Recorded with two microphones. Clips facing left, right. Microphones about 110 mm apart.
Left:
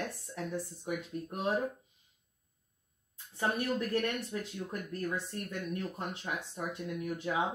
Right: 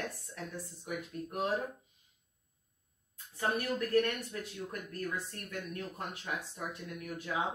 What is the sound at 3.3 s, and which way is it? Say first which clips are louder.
Speech: left 1 dB; 25° left (ahead or behind).